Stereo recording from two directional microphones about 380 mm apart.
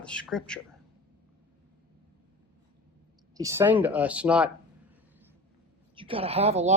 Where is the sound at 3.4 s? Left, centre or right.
Centre.